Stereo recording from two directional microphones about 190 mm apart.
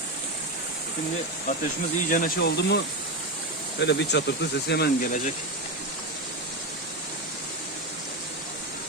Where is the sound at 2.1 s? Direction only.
50° left (ahead or behind).